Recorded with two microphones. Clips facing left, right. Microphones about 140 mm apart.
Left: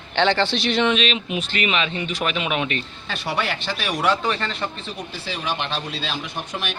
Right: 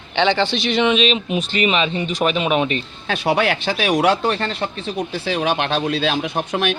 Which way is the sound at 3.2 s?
55° right (ahead or behind).